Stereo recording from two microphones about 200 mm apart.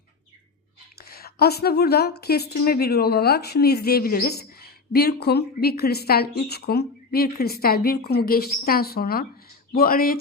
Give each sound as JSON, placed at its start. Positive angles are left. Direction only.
{"t": 0.9, "sound": "a woman's voice", "side_deg": 50}